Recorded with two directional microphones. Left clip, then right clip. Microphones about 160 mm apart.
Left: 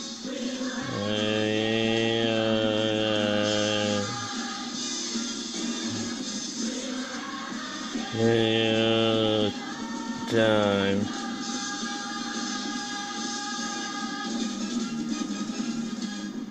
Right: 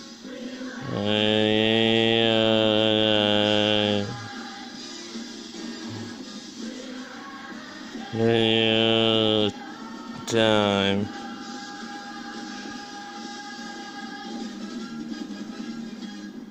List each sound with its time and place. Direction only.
1.0 s mantra: 55° right (ahead or behind)
8.2 s mantra: 40° right (ahead or behind)